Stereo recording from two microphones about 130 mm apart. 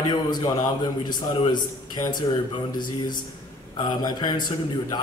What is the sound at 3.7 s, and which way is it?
Speech, 35° left (ahead or behind).